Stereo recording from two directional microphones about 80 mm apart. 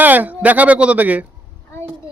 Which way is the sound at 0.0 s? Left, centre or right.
Right.